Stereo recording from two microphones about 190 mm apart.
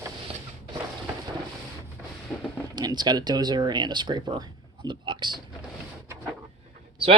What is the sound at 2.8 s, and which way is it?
Speech, 20° right (ahead or behind).